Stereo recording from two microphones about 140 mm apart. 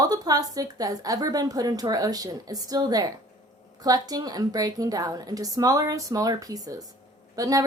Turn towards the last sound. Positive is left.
turn(degrees=-25)  # may be behind; listen again after turning